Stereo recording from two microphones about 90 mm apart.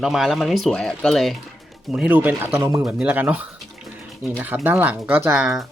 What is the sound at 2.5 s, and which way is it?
Speech, 30° right (ahead or behind).